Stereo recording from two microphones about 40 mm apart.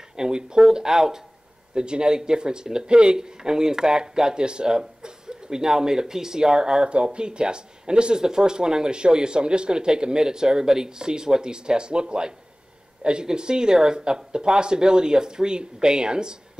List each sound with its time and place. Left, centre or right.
0.1 s speech: centre